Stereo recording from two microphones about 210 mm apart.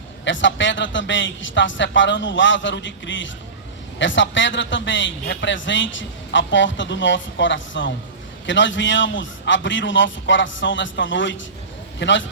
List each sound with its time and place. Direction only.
0.3 s a man's voice: 60° left (ahead or behind)